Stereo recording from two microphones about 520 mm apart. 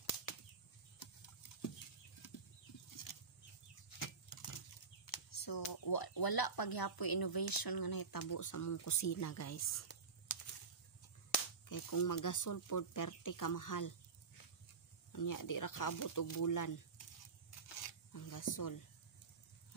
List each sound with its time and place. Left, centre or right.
4.0 s speech: left
11.3 s speech: left
15.1 s speech: left
18.1 s a sound: left